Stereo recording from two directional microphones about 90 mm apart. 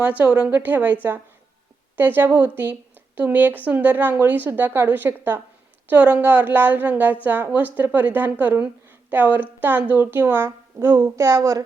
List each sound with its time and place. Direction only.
0.0 s a woman's voice: 15° right (ahead or behind)
2.0 s a woman's voice: 20° right (ahead or behind); by 11.6 s 40° right (ahead or behind)